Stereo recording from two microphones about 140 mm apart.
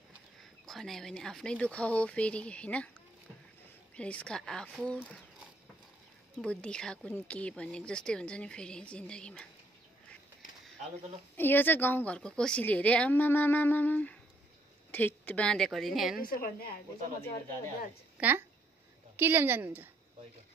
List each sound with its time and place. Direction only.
0.7 s speech: centre (ahead or behind)
3.9 s speech: 10° left (ahead or behind)
6.3 s speech: 10° left (ahead or behind)
11.3 s speech: 15° left (ahead or behind); by 16.2 s centre (ahead or behind)
16.3 s a woman's voice: 90° left
18.2 s a woman's voice: 10° right (ahead or behind)